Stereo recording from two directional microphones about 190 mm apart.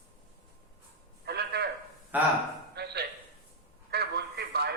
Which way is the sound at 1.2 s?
60° right (ahead or behind).